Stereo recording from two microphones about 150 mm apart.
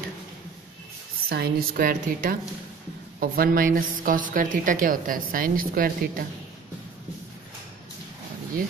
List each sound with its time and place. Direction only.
1.3 s a woman's voice: 85° right; by 6.2 s 70° right (ahead or behind)